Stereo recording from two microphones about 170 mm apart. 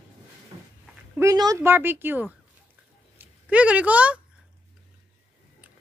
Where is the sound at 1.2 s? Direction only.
20° right (ahead or behind).